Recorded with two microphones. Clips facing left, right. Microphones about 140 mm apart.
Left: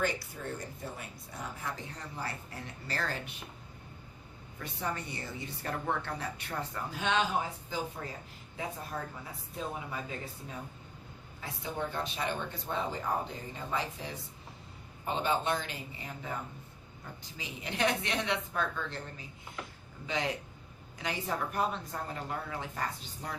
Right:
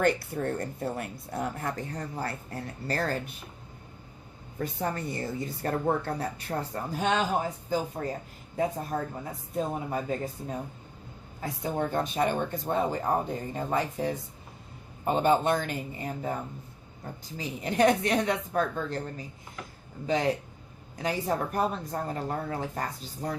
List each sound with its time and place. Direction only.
0.0 s speech: 60° right (ahead or behind); by 3.2 s 45° right (ahead or behind)
4.5 s a woman's voice: 40° right (ahead or behind)